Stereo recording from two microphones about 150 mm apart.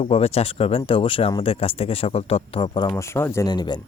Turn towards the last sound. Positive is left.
turn(degrees=25)  # may be behind; listen again after turning